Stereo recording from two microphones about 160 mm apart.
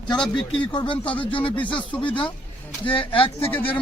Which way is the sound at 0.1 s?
5° left (ahead or behind).